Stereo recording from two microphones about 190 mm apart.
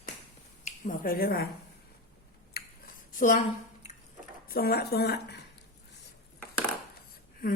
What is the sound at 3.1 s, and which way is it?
Speech, 45° left (ahead or behind).